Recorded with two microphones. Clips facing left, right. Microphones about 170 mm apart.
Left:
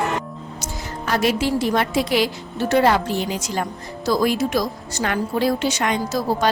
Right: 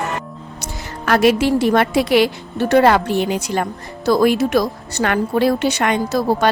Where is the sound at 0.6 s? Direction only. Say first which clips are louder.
Right 5 dB; 65° right (ahead or behind).